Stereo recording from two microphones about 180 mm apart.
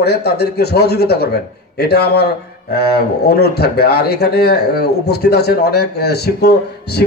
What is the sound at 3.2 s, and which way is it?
A man's voice, 65° left (ahead or behind).